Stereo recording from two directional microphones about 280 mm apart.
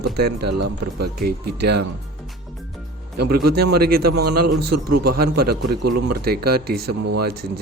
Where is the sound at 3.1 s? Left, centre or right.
Right.